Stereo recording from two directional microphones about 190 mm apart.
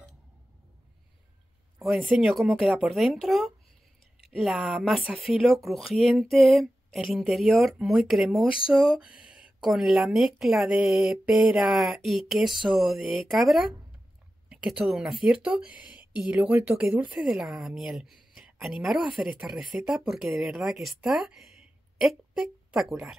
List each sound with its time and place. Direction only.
1.8 s speech: centre (ahead or behind)
8.5 s a sound: 25° left (ahead or behind)
8.8 s speech: 5° right (ahead or behind)